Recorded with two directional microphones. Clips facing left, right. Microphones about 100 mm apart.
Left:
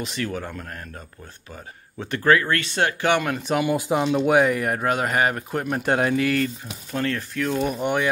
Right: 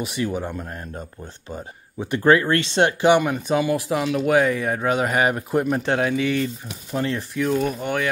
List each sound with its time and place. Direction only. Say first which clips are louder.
0.0 s speech: right 3 dB; 15° right (ahead or behind)
3.6 s speech: even; 20° left (ahead or behind)
4.3 s speech: right 1 dB; 10° left (ahead or behind); by 5.8 s 5° right (ahead or behind)
5.8 s a man's voice: even; 10° left (ahead or behind)
6.1 s speech: even; centre (ahead or behind)
6.9 s speech: right 1 dB; 15° right (ahead or behind)
7.3 s speech: right 3 dB; 5° right (ahead or behind)
7.8 s a man's voice: left 2 dB; 15° left (ahead or behind)